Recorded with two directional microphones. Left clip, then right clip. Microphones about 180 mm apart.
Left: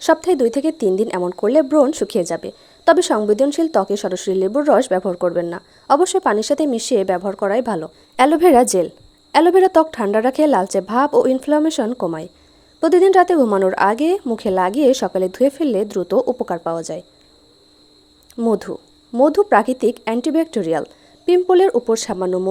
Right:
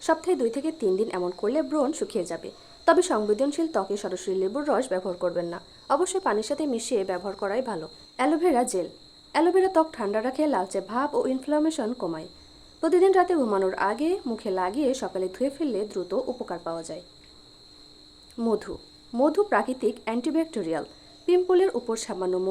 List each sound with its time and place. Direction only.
0.0 s a woman's voice: 40° left (ahead or behind)
18.3 s speech: 30° left (ahead or behind)